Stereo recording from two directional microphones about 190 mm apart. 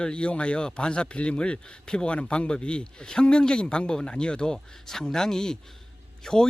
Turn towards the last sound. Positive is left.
turn(degrees=5)  # may be behind; listen again after turning